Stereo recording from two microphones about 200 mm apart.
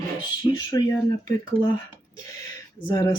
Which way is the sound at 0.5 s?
20° left (ahead or behind).